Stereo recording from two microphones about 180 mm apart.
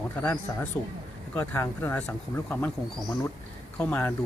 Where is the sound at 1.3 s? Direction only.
10° left (ahead or behind).